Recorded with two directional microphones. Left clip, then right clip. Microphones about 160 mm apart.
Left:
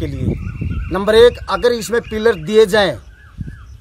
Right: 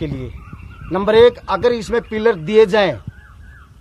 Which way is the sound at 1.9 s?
15° left (ahead or behind).